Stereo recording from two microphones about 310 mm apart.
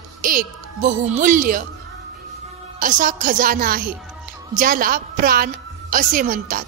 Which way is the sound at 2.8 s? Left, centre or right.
Right.